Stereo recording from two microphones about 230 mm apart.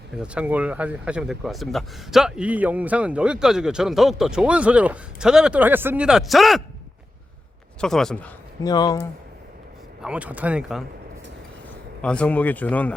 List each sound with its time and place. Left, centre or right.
0.2 s speech: centre
7.8 s speech: centre
8.6 s speech: centre
10.0 s speech: centre
12.0 s speech: centre